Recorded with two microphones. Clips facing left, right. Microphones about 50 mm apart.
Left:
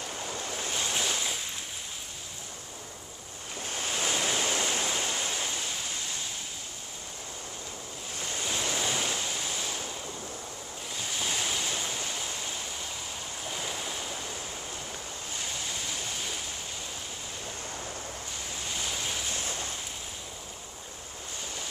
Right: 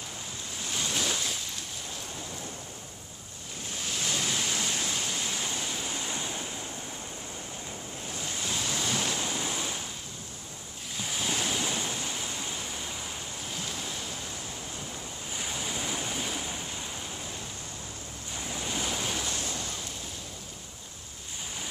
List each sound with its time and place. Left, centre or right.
0.7 s waves: centre
1.0 s a sound: centre
3.9 s waves: left
6.0 s waves: right
8.5 s waves: centre
9.2 s waves: centre
11.0 s waves: centre
15.3 s waves: centre
18.5 s waves: centre